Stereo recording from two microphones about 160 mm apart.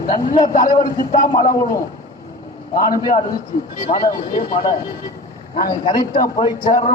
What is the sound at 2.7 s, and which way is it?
A man's voice, 60° left (ahead or behind).